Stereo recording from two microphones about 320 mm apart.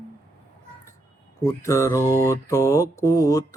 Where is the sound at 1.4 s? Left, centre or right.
Centre.